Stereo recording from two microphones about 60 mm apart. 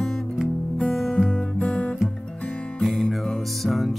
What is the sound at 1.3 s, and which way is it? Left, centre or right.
Music, centre.